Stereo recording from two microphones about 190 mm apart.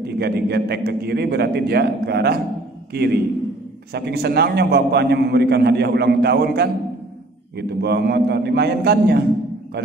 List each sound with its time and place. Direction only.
0.0 s a man's voice: 60° right (ahead or behind)